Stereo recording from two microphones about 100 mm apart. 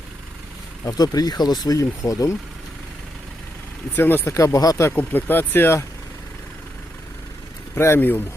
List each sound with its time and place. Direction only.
0.9 s speech: 40° left (ahead or behind)
3.9 s speech: 20° left (ahead or behind)
4.4 s speech: 30° left (ahead or behind)
4.9 s speech: 20° left (ahead or behind)
7.8 s speech: 25° left (ahead or behind)